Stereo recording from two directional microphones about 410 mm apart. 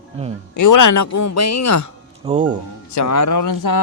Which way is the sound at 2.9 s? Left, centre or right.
Left.